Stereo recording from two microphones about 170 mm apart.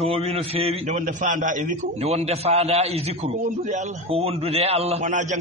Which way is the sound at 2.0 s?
40° right (ahead or behind).